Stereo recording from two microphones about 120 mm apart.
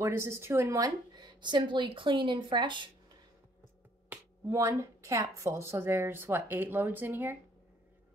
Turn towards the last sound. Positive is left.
turn(degrees=-15)  # may be behind; listen again after turning